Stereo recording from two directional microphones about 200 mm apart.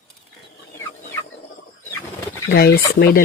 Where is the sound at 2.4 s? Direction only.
50° left (ahead or behind).